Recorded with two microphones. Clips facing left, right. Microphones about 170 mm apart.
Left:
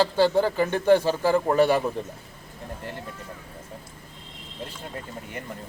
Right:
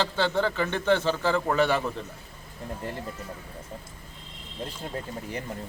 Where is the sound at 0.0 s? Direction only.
10° left (ahead or behind).